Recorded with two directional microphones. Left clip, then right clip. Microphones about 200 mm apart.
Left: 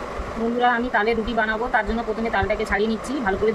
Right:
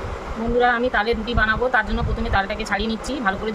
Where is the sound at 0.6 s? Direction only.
60° right (ahead or behind).